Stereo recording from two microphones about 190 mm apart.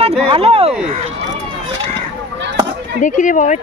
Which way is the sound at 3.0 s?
40° left (ahead or behind).